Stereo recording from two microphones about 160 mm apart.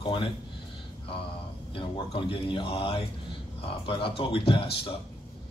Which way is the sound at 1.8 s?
35° left (ahead or behind).